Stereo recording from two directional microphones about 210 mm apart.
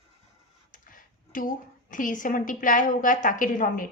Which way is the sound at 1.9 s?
40° left (ahead or behind).